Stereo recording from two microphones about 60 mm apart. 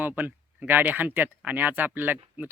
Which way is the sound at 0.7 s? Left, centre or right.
Right.